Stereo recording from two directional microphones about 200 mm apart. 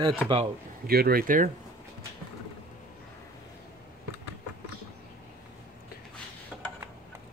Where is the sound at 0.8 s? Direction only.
50° right (ahead or behind).